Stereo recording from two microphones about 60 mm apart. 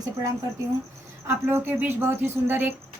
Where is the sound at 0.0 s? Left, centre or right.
Right.